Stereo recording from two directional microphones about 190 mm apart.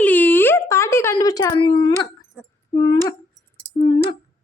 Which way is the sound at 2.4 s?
Centre (ahead or behind).